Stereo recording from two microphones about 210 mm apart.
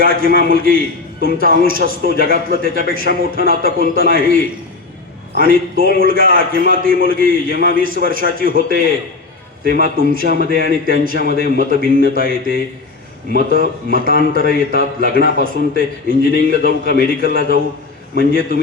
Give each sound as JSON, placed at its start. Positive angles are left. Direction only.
{"t": 0.0, "sound": "a man's voice", "side_deg": -45}